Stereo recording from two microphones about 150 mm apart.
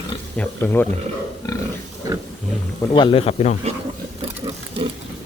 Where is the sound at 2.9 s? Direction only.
35° left (ahead or behind).